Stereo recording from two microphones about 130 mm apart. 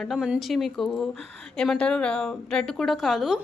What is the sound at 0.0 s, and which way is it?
A woman's voice, centre (ahead or behind).